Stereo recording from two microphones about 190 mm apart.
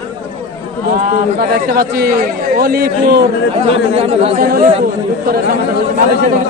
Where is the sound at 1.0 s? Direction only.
50° right (ahead or behind).